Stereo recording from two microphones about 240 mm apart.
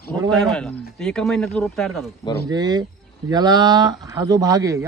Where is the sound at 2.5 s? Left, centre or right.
Centre.